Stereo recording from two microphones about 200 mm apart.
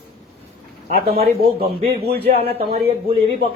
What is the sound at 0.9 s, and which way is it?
Speech, 45° right (ahead or behind).